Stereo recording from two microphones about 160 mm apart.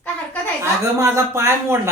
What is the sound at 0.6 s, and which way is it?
Speech, 20° right (ahead or behind).